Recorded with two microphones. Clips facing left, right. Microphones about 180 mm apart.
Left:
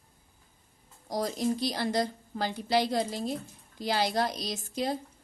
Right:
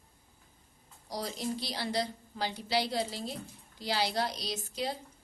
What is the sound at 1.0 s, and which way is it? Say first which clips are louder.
A woman's voice: left 7 dB; 50° left (ahead or behind).